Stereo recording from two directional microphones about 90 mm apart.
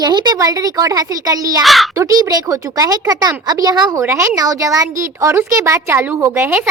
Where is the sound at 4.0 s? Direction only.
30° right (ahead or behind).